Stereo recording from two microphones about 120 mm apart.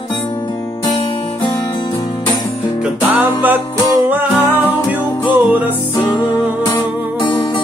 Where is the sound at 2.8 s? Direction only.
15° right (ahead or behind).